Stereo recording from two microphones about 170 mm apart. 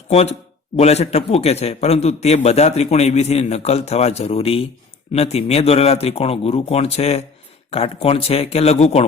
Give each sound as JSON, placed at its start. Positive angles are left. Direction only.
{"t": 0.1, "sound": "a man's voice", "side_deg": 40}